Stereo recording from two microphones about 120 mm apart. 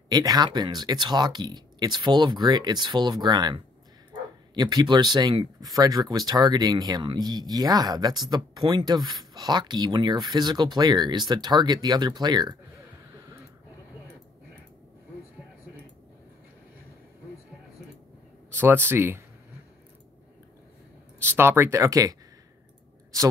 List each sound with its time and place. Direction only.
0.1 s speech: 35° right (ahead or behind)
5.6 s speech: 30° right (ahead or behind)
18.5 s speech: 15° right (ahead or behind)
21.2 s speech: 20° right (ahead or behind)